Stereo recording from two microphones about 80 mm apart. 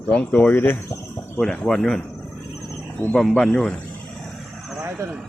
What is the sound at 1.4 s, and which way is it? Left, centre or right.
Speech, centre.